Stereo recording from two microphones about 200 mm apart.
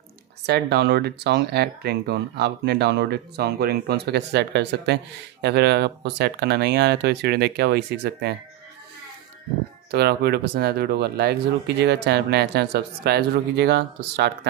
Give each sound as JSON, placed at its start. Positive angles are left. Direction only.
{"t": 0.5, "sound": "speech", "side_deg": -55}
{"t": 9.8, "sound": "speech", "side_deg": -55}